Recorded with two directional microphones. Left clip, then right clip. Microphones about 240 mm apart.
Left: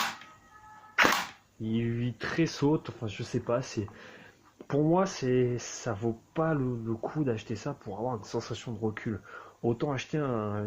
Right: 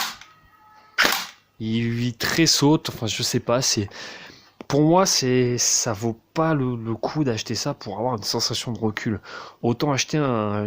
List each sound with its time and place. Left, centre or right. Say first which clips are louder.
1.6 s speech: right 7 dB; right